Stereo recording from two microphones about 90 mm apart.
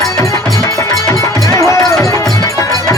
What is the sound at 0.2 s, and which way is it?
Music, 40° left (ahead or behind).